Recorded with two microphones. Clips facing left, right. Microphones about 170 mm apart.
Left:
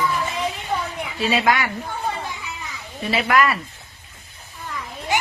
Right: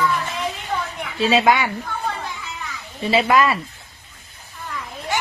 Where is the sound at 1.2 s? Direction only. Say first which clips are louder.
Right 3 dB; 25° right (ahead or behind).